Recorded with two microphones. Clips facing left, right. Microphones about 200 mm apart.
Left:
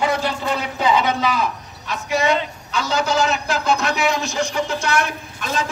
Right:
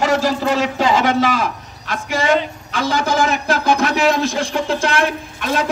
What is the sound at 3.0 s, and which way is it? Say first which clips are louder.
Speech: right 3 dB; 55° right (ahead or behind).